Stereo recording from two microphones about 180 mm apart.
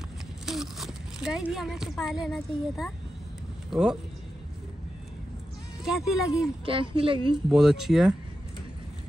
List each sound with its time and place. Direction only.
0.5 s speech: centre (ahead or behind)
5.9 s speech: centre (ahead or behind)
6.6 s speech: 30° right (ahead or behind)
7.4 s speech: centre (ahead or behind)